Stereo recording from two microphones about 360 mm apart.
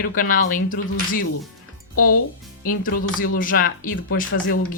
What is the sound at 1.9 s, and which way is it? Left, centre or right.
Speech, left.